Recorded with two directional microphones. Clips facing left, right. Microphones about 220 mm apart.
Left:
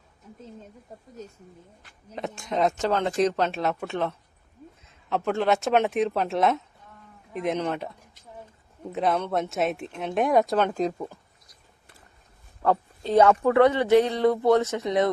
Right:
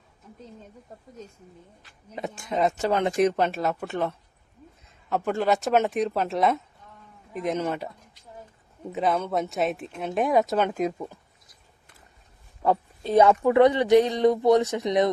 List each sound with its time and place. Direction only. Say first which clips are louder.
0.9 s speech: left 2 dB; centre (ahead or behind)
2.1 s speech: even; 5° right (ahead or behind)
2.9 s speech: right 1 dB; 15° right (ahead or behind)
3.6 s speech: even; centre (ahead or behind)
8.9 s speech: even; centre (ahead or behind)
12.6 s speech: even; 10° right (ahead or behind)